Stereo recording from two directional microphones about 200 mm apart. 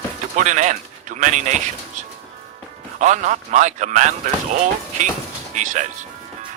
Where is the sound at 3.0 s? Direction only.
35° right (ahead or behind).